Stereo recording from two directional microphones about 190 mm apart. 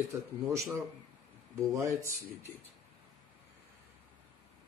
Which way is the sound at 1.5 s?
15° right (ahead or behind).